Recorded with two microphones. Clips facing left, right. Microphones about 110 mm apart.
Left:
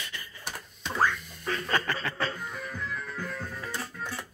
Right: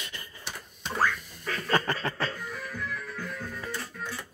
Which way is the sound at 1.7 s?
35° right (ahead or behind).